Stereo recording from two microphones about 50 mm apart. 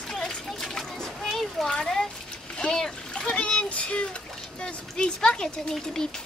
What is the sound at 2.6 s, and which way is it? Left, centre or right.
Splash, centre.